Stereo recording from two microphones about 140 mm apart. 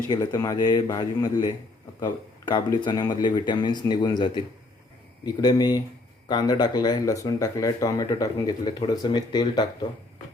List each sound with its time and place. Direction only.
0.1 s speech: 30° left (ahead or behind)